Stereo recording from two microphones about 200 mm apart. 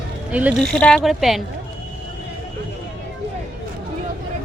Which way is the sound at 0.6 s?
5° left (ahead or behind).